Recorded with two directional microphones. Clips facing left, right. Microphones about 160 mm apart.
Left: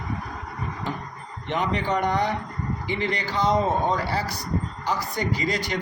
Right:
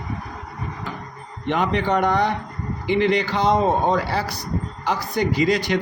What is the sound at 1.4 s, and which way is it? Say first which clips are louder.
A man's voice: right 4 dB; 65° right (ahead or behind).